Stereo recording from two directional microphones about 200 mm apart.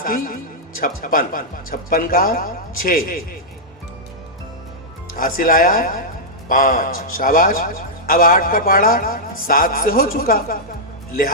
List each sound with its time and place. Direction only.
0.0 s a man's voice: 45° left (ahead or behind)
5.1 s a man's voice: 45° left (ahead or behind)